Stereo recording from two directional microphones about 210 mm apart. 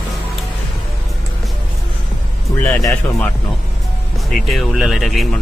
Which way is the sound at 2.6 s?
10° left (ahead or behind).